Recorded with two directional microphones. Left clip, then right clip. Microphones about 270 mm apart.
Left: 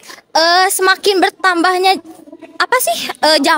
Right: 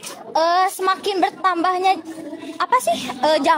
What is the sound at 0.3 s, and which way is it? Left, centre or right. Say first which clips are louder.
Speech: left 6 dB; left.